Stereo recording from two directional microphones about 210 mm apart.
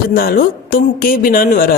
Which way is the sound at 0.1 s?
45° left (ahead or behind).